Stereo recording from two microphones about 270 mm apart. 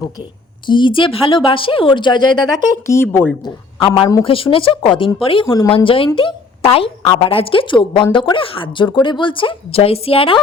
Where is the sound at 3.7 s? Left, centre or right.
Centre.